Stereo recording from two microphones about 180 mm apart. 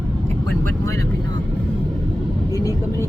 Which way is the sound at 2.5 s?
20° left (ahead or behind).